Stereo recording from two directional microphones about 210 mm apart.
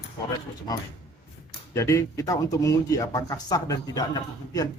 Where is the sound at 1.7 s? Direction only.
15° left (ahead or behind).